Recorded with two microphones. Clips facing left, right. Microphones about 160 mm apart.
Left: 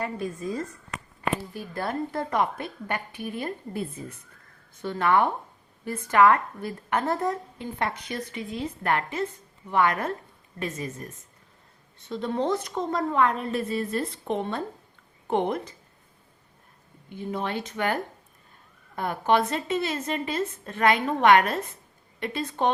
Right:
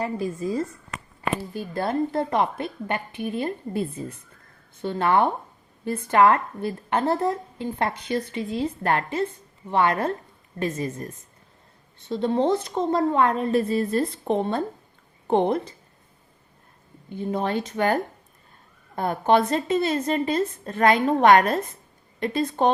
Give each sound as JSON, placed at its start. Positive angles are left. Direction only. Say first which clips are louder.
{"t": 0.0, "sound": "a woman's voice", "louder": "right 4 dB", "side_deg": -30}
{"t": 17.1, "sound": "a woman's voice", "louder": "right 5 dB", "side_deg": -35}